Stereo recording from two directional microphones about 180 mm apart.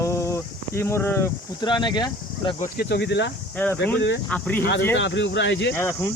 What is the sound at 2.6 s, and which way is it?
Speech, 60° left (ahead or behind).